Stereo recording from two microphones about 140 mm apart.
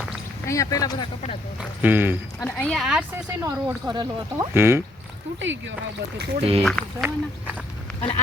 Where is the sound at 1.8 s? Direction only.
15° right (ahead or behind).